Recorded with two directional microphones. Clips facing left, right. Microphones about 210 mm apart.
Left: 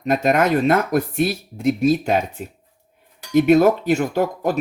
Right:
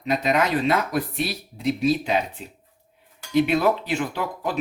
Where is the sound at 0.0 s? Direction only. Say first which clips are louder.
Left 4 dB; 50° left (ahead or behind).